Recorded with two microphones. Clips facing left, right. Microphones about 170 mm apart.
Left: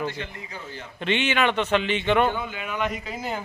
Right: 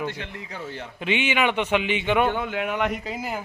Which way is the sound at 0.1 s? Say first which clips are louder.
Even; 65° right (ahead or behind).